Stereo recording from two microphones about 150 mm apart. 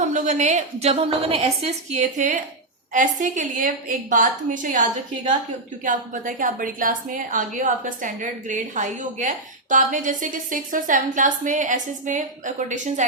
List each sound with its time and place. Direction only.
0.1 s a woman's voice: 50° right (ahead or behind)